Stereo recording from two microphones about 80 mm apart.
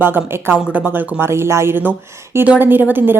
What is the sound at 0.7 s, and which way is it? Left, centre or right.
Speech, right.